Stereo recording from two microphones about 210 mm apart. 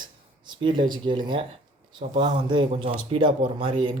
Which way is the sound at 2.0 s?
20° right (ahead or behind).